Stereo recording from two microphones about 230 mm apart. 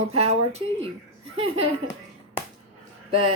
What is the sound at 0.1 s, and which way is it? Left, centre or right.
Speech, right.